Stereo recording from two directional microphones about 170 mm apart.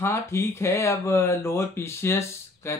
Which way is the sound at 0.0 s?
15° left (ahead or behind).